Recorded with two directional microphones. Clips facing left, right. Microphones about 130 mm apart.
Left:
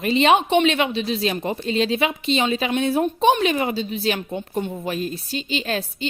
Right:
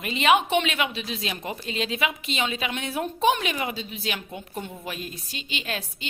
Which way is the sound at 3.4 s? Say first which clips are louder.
Left 8 dB; 35° left (ahead or behind).